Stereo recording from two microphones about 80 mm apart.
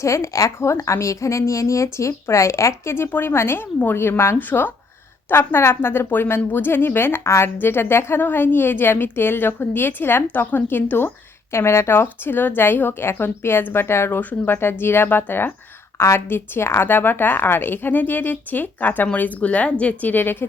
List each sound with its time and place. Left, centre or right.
0.0 s a woman's voice: left